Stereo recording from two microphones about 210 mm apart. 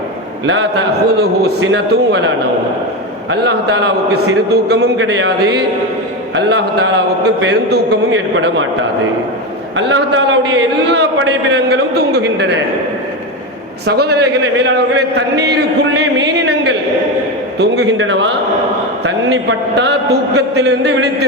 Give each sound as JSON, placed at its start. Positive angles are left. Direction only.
{"t": 0.4, "sound": "a man's voice", "side_deg": -60}
{"t": 1.2, "sound": "a man's voice", "side_deg": -50}
{"t": 9.7, "sound": "a man's voice", "side_deg": -60}
{"t": 13.8, "sound": "a man's voice", "side_deg": -50}